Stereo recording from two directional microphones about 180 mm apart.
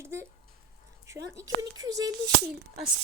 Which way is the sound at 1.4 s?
20° right (ahead or behind).